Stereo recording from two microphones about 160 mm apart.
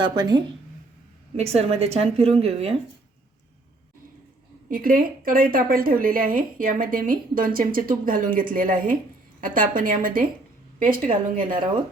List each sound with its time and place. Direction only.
0.0 s speech: 25° right (ahead or behind)
1.4 s a woman's voice: 40° right (ahead or behind)
4.7 s speech: 60° right (ahead or behind)